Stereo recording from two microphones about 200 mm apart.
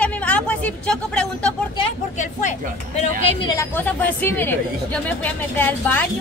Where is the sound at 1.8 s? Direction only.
35° left (ahead or behind).